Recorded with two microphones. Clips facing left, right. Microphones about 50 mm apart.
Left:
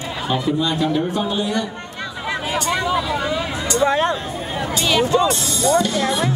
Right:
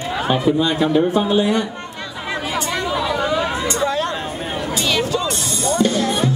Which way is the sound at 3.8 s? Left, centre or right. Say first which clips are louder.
Left 6 dB; left.